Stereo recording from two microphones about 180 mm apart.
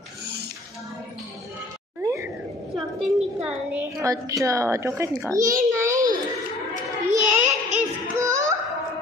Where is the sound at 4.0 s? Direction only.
20° right (ahead or behind).